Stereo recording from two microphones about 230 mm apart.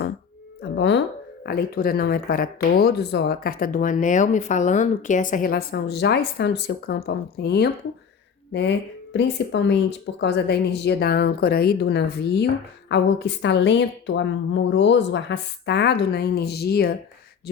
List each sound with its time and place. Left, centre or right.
0.6 s music: left
1.5 s a woman's voice: left